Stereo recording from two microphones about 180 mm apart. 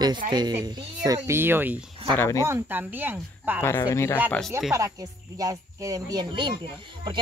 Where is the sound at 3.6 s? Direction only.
15° left (ahead or behind).